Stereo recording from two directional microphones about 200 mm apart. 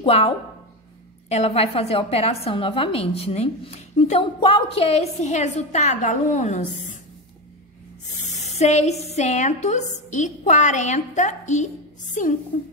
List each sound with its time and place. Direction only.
0.0 s a woman's voice: 30° left (ahead or behind)
1.3 s a woman's voice: 30° left (ahead or behind)
8.4 s a woman's voice: 35° left (ahead or behind)